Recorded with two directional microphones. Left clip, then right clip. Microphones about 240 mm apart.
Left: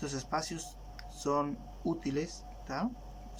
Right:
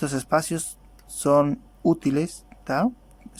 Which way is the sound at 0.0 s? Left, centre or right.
Right.